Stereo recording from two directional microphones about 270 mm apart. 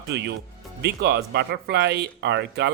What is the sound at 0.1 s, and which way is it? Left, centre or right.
Speech, right.